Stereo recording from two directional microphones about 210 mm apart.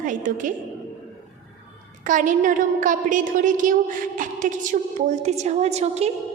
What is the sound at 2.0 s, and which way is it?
A woman's voice, 40° right (ahead or behind).